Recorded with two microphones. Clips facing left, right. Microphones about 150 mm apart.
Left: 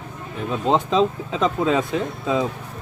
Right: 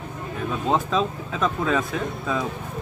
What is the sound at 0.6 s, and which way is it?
Speech, 25° left (ahead or behind).